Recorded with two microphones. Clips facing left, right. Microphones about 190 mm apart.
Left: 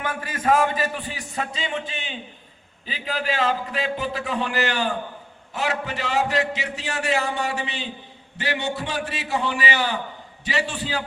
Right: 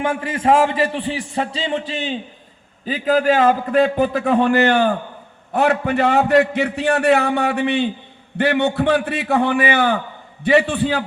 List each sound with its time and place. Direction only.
0.0 s a man's voice: 25° right (ahead or behind)
2.8 s a man's voice: 45° right (ahead or behind)